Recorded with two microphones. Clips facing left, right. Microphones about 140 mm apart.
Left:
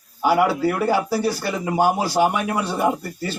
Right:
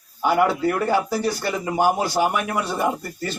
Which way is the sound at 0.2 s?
10° left (ahead or behind).